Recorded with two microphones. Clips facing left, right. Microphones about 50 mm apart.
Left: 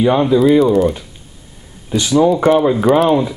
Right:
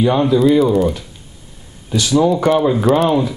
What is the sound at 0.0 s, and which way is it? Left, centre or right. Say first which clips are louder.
Speech: left 1 dB; centre.